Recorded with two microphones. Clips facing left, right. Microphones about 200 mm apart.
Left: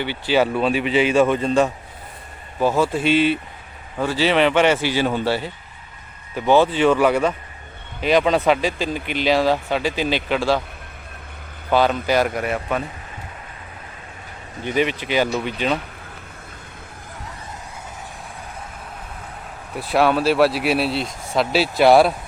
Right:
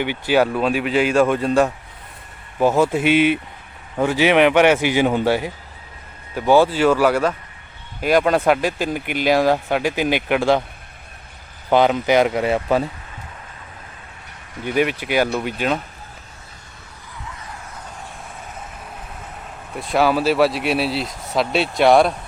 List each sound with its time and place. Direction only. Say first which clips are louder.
0.0 s speech: right 2 dB; 15° right (ahead or behind)
2.6 s speech: right 2 dB; 15° right (ahead or behind)
11.7 s speech: right 3 dB; 20° right (ahead or behind)
14.8 s speech: right 1 dB; 10° right (ahead or behind)
19.7 s speech: even; centre (ahead or behind)